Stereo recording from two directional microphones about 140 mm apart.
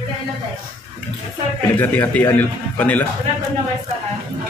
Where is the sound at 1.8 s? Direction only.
15° left (ahead or behind).